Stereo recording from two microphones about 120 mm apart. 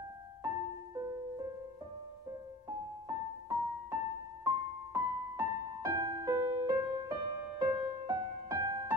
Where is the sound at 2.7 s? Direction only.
35° right (ahead or behind).